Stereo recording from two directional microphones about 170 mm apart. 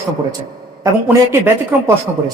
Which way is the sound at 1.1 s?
15° right (ahead or behind).